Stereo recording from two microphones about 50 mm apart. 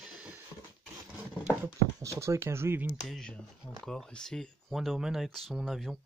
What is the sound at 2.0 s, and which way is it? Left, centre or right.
Speech, right.